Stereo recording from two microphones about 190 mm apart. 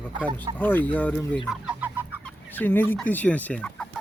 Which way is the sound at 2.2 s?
10° left (ahead or behind).